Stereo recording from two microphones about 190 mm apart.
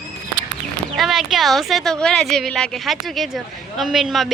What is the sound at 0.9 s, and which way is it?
Speech, centre (ahead or behind).